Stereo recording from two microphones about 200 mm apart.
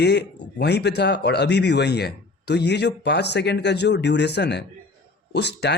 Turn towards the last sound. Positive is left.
turn(degrees=55)  # may be behind; listen again after turning